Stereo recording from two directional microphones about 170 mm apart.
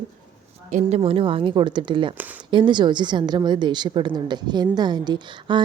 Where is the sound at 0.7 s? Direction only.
40° right (ahead or behind).